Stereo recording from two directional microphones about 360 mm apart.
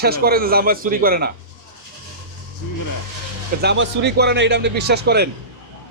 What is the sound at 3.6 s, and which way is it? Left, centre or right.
A man's voice, right.